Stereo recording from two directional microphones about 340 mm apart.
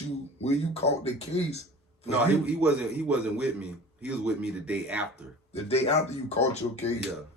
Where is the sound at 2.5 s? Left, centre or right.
Centre.